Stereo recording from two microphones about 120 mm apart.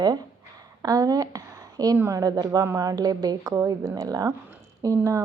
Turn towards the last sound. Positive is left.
turn(degrees=-25)  # may be behind; listen again after turning